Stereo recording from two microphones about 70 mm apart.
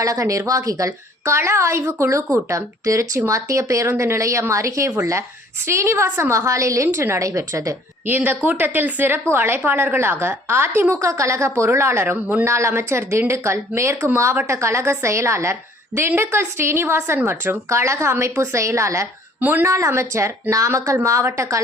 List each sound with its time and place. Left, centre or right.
0.0 s a woman's voice: right
8.0 s a woman's voice: right
11.0 s a woman's voice: right
19.4 s speech: right
19.6 s a woman's voice: right